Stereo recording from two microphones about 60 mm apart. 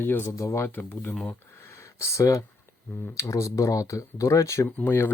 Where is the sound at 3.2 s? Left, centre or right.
Left.